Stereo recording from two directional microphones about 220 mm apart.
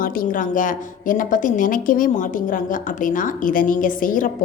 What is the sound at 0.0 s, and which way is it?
A woman's voice, 40° left (ahead or behind).